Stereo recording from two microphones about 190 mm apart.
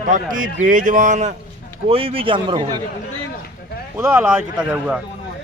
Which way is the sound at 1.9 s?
30° right (ahead or behind).